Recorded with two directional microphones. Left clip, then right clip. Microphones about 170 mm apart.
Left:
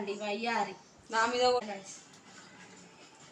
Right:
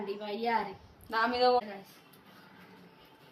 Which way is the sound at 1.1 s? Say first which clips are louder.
Even; 80° right.